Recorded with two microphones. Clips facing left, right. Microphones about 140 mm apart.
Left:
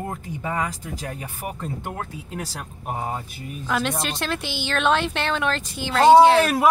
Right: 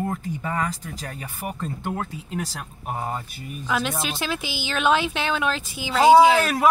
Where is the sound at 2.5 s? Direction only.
5° left (ahead or behind).